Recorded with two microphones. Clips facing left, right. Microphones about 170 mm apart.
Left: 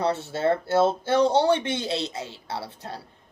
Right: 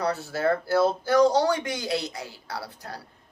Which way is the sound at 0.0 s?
25° left (ahead or behind).